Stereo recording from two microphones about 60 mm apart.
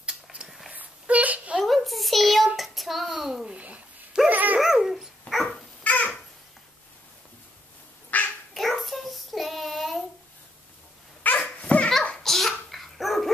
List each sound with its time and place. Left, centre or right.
0.0 s a sound: centre
1.6 s a sound: centre
3.4 s a sound: right
4.3 s dog: right
4.6 s dog: centre
5.9 s babbling: left
8.1 s duck: left
8.5 s child singing: centre
11.4 s dog: left
12.2 s bathtub: centre